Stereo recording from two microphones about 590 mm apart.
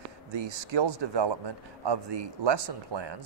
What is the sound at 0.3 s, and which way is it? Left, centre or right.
Speech, right.